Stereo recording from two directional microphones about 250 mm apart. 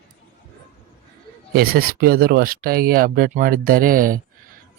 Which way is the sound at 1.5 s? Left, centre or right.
Right.